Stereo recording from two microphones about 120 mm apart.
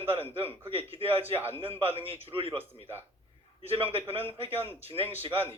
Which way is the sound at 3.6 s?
50° right (ahead or behind).